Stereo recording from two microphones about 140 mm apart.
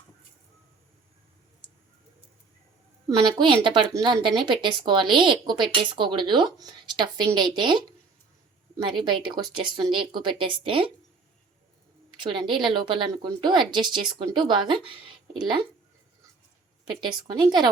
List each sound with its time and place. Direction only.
3.1 s speech: 30° right (ahead or behind)
12.2 s speech: 35° right (ahead or behind)
16.8 s speech: 30° right (ahead or behind)